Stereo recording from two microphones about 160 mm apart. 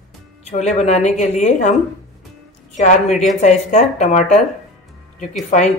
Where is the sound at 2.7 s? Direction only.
50° left (ahead or behind).